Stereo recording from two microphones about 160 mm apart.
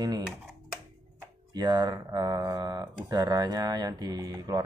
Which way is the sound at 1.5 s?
25° right (ahead or behind).